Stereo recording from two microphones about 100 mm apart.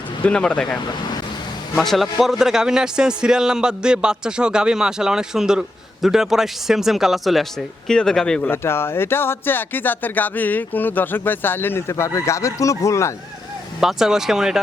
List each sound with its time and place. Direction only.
0.3 s a man's voice: 10° left (ahead or behind)
8.4 s speech: 25° left (ahead or behind)
13.8 s speech: 5° right (ahead or behind)